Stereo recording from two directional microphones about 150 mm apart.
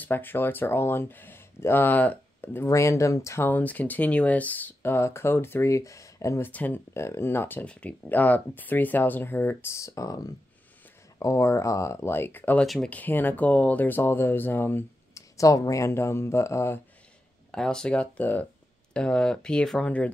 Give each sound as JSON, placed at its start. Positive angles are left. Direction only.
{"t": 0.0, "sound": "speech", "side_deg": 15}
{"t": 17.5, "sound": "speech", "side_deg": 5}